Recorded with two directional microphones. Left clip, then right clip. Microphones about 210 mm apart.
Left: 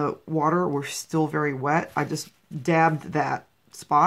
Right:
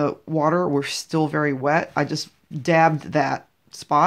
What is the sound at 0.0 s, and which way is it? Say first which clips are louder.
Speech: right 3 dB; 30° right (ahead or behind).